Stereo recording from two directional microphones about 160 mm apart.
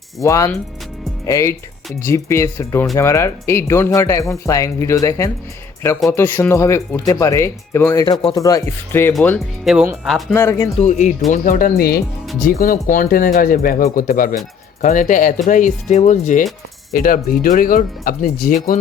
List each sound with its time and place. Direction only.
0.2 s speech: 20° left (ahead or behind)
8.0 s speech: 30° left (ahead or behind); by 9.1 s 15° left (ahead or behind)
9.7 s speech: centre (ahead or behind)
10.3 s speech: 15° left (ahead or behind)
10.8 s speech: 50° left (ahead or behind)
16.9 s speech: 60° left (ahead or behind)